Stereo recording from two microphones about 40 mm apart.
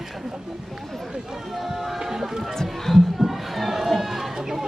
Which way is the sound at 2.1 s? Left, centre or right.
Centre.